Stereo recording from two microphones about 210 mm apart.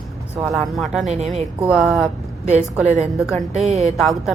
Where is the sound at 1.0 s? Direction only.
30° right (ahead or behind).